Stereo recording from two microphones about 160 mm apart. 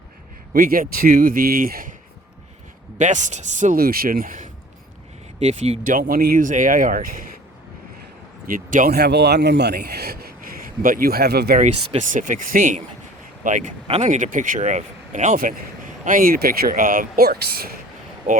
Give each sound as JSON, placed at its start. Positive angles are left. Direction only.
{"t": 0.5, "sound": "speech", "side_deg": -65}
{"t": 3.0, "sound": "speech", "side_deg": -50}
{"t": 5.4, "sound": "speech", "side_deg": -40}
{"t": 5.8, "sound": "speech", "side_deg": -60}
{"t": 8.4, "sound": "speech", "side_deg": -60}
{"t": 11.5, "sound": "speech", "side_deg": -45}
{"t": 18.3, "sound": "speech", "side_deg": -55}